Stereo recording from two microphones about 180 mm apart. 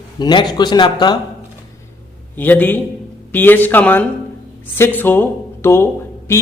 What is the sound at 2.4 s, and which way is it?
A man's voice, 10° left (ahead or behind).